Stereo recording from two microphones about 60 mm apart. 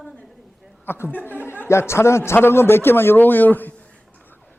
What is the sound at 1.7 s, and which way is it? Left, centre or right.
A man's voice, left.